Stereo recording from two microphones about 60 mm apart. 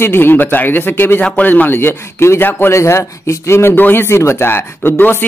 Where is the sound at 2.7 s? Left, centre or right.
Left.